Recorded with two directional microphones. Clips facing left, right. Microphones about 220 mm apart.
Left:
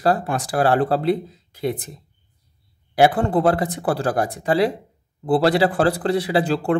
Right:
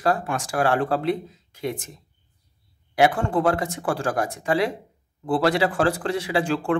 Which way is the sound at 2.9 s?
35° left (ahead or behind).